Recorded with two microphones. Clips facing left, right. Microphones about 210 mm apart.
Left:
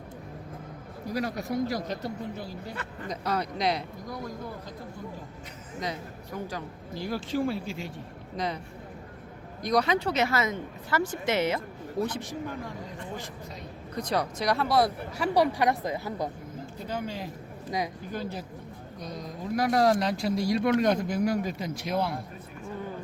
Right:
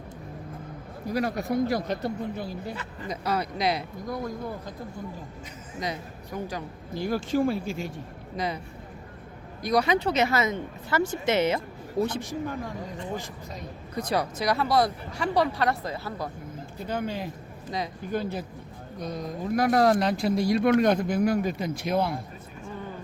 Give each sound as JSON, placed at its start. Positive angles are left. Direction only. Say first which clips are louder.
{"t": 1.1, "sound": "speech", "louder": "right 3 dB", "side_deg": -55}
{"t": 3.1, "sound": "speech", "louder": "right 2 dB", "side_deg": -5}
{"t": 4.1, "sound": "speech", "louder": "right 5 dB", "side_deg": -50}
{"t": 5.8, "sound": "speech", "louder": "right 2 dB", "side_deg": -15}
{"t": 6.9, "sound": "speech", "louder": "right 4 dB", "side_deg": -50}
{"t": 8.4, "sound": "speech", "louder": "right 1 dB", "side_deg": -10}
{"t": 9.6, "sound": "speech", "louder": "right 2 dB", "side_deg": -10}
{"t": 12.2, "sound": "speech", "louder": "right 3 dB", "side_deg": -45}
{"t": 13.9, "sound": "speech", "louder": "right 1 dB", "side_deg": -5}
{"t": 16.9, "sound": "speech", "louder": "right 4 dB", "side_deg": -55}
{"t": 17.7, "sound": "speech", "louder": "left 1 dB", "side_deg": 15}
{"t": 18.1, "sound": "speech", "louder": "right 5 dB", "side_deg": -60}